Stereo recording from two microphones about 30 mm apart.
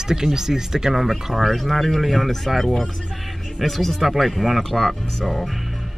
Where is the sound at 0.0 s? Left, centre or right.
Right.